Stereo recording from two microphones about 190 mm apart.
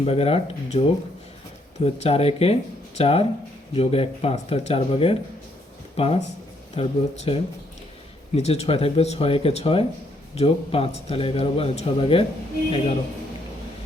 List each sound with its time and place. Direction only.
0.0 s a man's voice: 30° left (ahead or behind)
1.8 s a man's voice: 30° left (ahead or behind)